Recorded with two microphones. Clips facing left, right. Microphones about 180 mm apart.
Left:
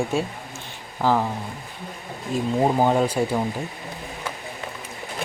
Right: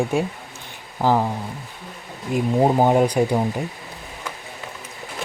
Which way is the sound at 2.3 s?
15° right (ahead or behind).